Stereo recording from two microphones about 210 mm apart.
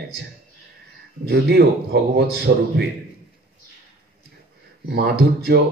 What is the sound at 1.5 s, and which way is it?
Speech, 50° right (ahead or behind).